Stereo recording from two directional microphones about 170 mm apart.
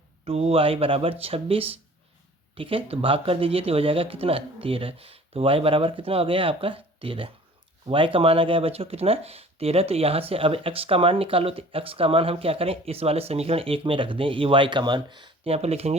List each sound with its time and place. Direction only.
0.3 s speech: 35° right (ahead or behind)